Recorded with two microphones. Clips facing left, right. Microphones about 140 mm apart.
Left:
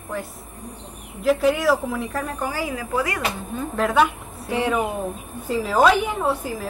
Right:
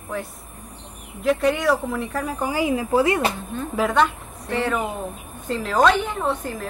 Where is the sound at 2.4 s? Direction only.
20° right (ahead or behind).